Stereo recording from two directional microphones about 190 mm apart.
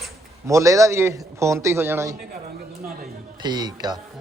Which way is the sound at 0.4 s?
15° right (ahead or behind).